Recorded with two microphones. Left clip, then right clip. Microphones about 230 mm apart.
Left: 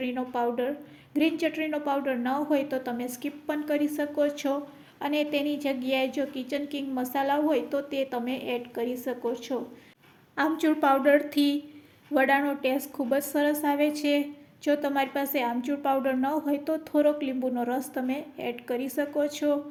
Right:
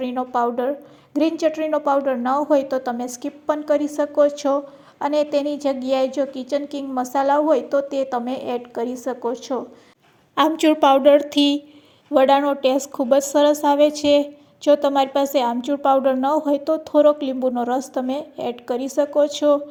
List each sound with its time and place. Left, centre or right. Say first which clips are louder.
0.0 s a woman's voice: right 8 dB; right